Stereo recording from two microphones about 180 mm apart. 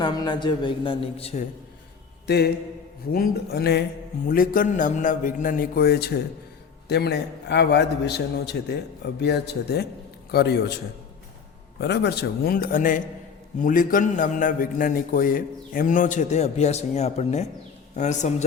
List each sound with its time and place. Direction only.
0.0 s a man's voice: 25° left (ahead or behind)
2.2 s a man's voice: 65° left (ahead or behind)
4.3 s a man's voice: 50° left (ahead or behind)
11.8 s a man's voice: 65° left (ahead or behind); by 18.4 s 40° left (ahead or behind)